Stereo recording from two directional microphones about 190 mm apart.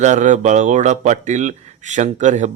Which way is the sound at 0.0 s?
40° right (ahead or behind).